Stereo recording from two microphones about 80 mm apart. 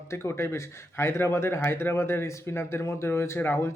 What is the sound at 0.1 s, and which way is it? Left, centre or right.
Speech, left.